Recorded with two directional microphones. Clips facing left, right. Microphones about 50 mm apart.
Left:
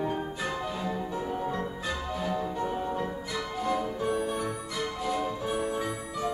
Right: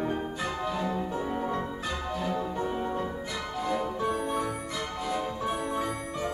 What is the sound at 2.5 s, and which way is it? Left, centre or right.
Music, right.